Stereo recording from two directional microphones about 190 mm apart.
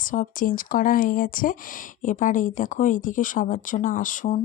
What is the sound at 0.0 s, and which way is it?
Speech, 45° left (ahead or behind).